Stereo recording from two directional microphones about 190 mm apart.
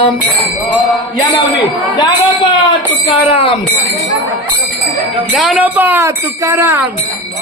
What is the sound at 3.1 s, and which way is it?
Speech, 30° left (ahead or behind).